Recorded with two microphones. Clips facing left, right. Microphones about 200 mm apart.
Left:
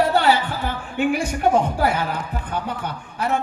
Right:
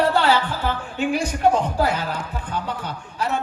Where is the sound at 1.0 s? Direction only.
55° left (ahead or behind).